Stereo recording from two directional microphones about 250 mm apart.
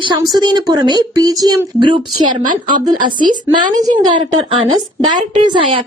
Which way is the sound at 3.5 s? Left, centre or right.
Centre.